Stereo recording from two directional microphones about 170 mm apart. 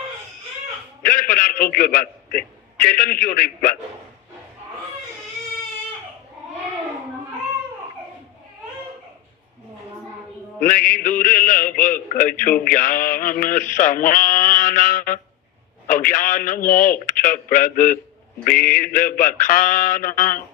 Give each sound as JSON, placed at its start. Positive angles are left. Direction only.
{"t": 1.0, "sound": "a man's voice", "side_deg": 55}
{"t": 2.8, "sound": "mantra", "side_deg": 55}
{"t": 10.7, "sound": "mantra", "side_deg": 55}